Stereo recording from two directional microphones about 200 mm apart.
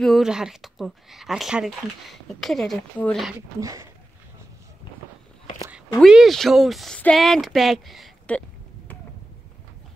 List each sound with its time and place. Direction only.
0.0 s speech: centre (ahead or behind)
3.3 s speech: 15° right (ahead or behind)
5.9 s speech: centre (ahead or behind)